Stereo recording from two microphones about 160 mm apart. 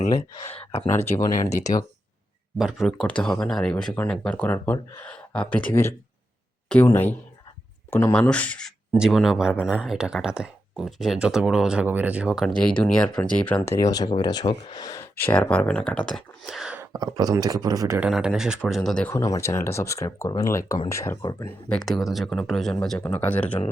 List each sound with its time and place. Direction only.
0.4 s speech: 40° left (ahead or behind)
1.5 s speech: 20° left (ahead or behind)
2.6 s speech: centre (ahead or behind)
16.9 s speech: 25° right (ahead or behind)
18.1 s speech: centre (ahead or behind)
19.1 s speech: 20° left (ahead or behind)
21.4 s speech: 5° left (ahead or behind)